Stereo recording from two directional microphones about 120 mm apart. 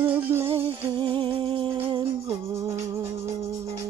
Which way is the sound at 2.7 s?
20° right (ahead or behind).